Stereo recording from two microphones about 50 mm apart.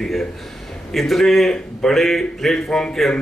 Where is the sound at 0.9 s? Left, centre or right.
Centre.